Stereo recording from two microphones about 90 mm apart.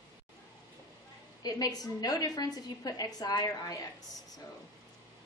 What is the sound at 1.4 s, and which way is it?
A woman's voice, 45° left (ahead or behind).